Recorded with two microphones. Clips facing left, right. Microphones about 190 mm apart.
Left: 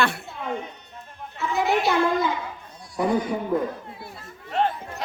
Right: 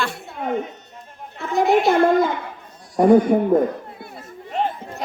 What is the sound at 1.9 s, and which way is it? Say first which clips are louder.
Speech: right 6 dB; 55° right (ahead or behind).